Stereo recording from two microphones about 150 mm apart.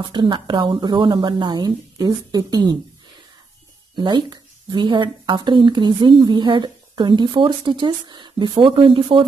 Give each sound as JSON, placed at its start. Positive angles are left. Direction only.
{"t": 0.0, "sound": "speech", "side_deg": -30}
{"t": 3.9, "sound": "speech", "side_deg": -30}